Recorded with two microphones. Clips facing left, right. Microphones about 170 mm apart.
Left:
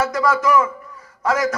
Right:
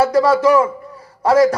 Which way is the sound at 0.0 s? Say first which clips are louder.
Right 6 dB; 35° right (ahead or behind).